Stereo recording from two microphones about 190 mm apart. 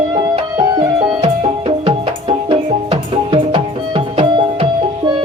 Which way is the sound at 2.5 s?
25° right (ahead or behind).